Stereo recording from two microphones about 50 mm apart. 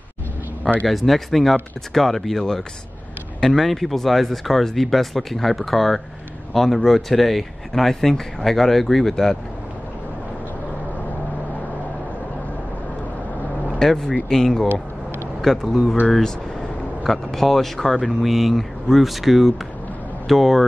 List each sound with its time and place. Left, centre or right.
0.8 s speech: centre
13.7 s speech: centre